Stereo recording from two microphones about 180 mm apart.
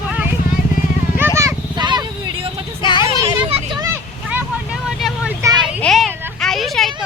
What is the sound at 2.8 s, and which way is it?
Speech, 25° left (ahead or behind).